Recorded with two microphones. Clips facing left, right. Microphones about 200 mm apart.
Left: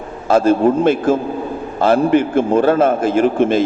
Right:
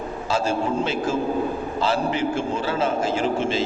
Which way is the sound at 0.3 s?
55° left (ahead or behind).